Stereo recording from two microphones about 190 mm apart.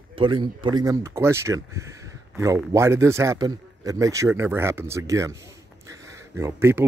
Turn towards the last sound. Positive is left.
turn(degrees=-15)  # may be behind; listen again after turning